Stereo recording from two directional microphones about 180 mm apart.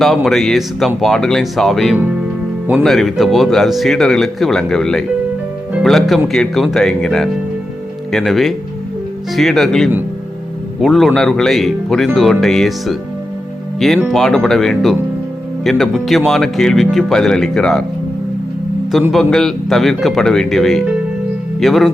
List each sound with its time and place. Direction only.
0.0 s speech: centre (ahead or behind)
19.1 s speech: centre (ahead or behind)